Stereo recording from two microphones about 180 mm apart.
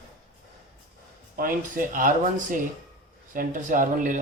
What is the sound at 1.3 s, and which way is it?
Speech, 50° right (ahead or behind).